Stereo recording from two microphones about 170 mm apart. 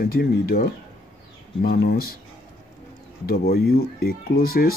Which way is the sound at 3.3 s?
65° left (ahead or behind).